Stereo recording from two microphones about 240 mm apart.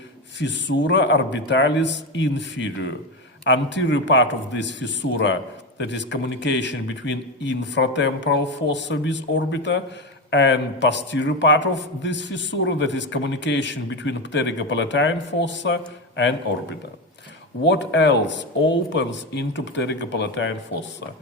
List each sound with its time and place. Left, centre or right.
0.3 s a man's voice: left